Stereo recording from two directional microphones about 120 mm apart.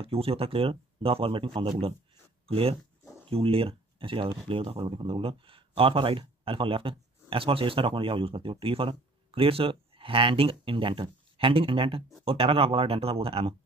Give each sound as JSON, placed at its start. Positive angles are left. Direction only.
{"t": 0.0, "sound": "speech", "side_deg": -55}